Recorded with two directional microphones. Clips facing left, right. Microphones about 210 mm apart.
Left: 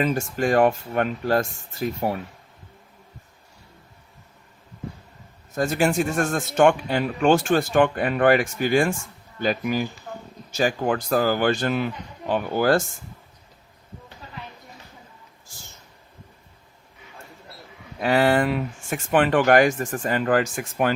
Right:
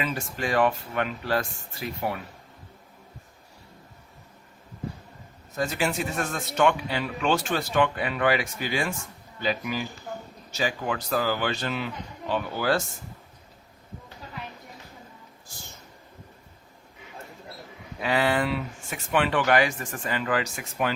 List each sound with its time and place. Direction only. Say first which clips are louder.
0.0 s speech: left 7 dB; 45° left (ahead or behind)
5.5 s speech: left 6 dB; 50° left (ahead or behind)
18.0 s speech: left 5 dB; 45° left (ahead or behind)